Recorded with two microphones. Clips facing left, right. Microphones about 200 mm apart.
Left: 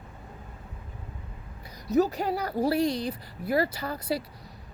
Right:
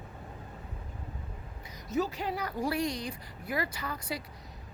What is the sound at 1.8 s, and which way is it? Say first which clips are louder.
A woman's voice: left 7 dB; 40° left (ahead or behind).